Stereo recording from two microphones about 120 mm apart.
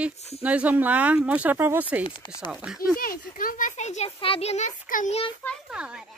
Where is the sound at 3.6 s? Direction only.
80° left.